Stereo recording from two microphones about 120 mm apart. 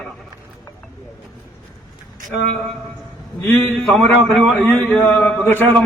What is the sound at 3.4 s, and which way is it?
A man's voice, 5° left (ahead or behind).